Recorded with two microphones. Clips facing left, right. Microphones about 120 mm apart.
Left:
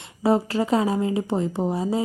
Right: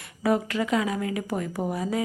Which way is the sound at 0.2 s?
30° left (ahead or behind).